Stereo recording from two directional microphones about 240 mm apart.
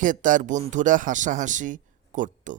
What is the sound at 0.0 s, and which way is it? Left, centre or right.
Speech, right.